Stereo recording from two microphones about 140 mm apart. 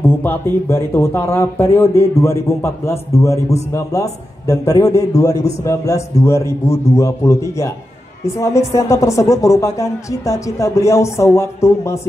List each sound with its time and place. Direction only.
0.0 s a man's voice: 15° left (ahead or behind)